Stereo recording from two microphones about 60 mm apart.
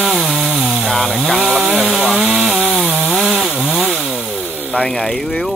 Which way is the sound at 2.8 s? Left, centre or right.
Right.